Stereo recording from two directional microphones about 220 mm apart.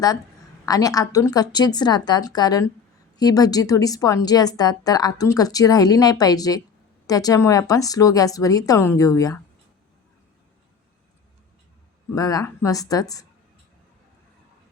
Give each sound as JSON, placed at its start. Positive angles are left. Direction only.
{"t": 0.6, "sound": "a woman's voice", "side_deg": 15}
{"t": 12.1, "sound": "a woman's voice", "side_deg": 15}